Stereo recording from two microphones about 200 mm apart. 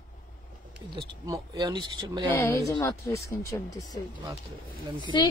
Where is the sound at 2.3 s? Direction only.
10° left (ahead or behind).